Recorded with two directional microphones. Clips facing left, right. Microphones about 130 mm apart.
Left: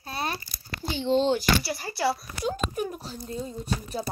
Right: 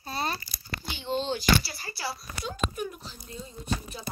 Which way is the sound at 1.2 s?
60° left (ahead or behind).